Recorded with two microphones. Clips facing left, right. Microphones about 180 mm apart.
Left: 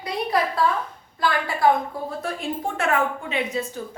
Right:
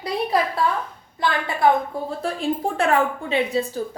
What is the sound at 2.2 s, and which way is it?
A woman's voice, 35° right (ahead or behind).